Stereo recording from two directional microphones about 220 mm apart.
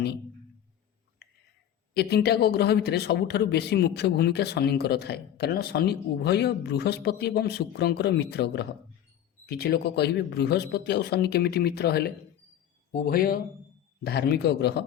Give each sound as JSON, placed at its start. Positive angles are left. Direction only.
{"t": 1.9, "sound": "speech", "side_deg": 45}